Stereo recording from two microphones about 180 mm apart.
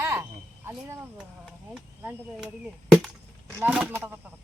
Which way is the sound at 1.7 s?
5° right (ahead or behind).